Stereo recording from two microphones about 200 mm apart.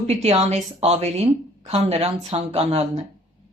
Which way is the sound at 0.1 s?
30° right (ahead or behind).